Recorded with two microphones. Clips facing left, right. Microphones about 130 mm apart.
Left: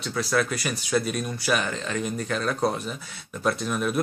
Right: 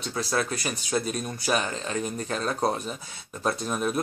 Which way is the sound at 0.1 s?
25° right (ahead or behind).